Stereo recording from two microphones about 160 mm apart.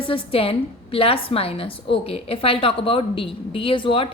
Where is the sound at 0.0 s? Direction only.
35° left (ahead or behind).